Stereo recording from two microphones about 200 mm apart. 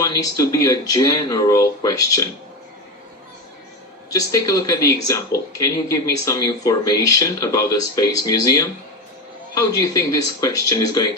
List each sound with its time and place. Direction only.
0.0 s speech: 15° left (ahead or behind)
4.1 s speech: 15° left (ahead or behind)